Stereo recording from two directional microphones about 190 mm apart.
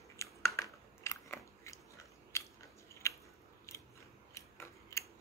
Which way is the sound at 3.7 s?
15° left (ahead or behind).